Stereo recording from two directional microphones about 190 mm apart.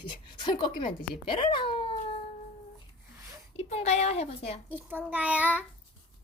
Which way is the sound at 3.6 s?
35° left (ahead or behind).